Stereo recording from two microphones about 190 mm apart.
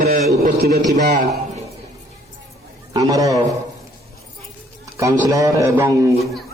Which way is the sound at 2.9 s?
20° right (ahead or behind).